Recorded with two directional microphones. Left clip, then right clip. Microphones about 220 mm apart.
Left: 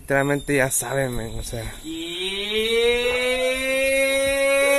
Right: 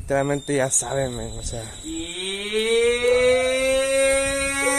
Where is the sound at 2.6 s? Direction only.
Centre (ahead or behind).